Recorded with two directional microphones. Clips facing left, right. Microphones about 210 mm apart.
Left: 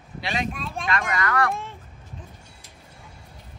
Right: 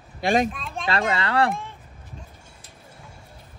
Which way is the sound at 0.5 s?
Centre (ahead or behind).